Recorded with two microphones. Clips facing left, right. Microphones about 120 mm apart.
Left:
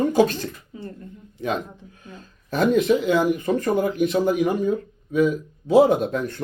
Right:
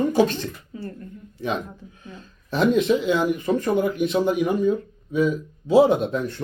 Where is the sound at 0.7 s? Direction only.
15° left (ahead or behind).